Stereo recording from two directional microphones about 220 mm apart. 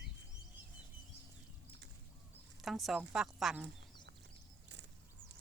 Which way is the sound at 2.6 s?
Centre (ahead or behind).